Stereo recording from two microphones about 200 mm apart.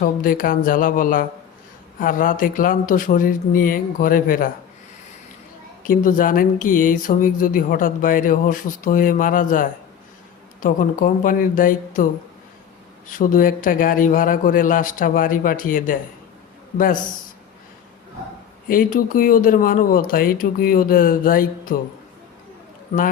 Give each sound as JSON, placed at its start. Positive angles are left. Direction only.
{"t": 0.0, "sound": "speech", "side_deg": 45}
{"t": 5.8, "sound": "speech", "side_deg": 40}
{"t": 13.1, "sound": "speech", "side_deg": 45}
{"t": 18.7, "sound": "speech", "side_deg": 45}